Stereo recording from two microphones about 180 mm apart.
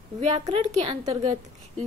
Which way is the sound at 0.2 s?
35° right (ahead or behind).